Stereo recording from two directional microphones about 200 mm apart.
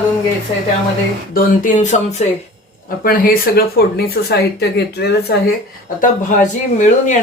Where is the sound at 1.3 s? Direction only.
45° left (ahead or behind).